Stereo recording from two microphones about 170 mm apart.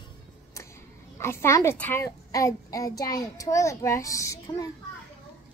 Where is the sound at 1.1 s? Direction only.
15° left (ahead or behind).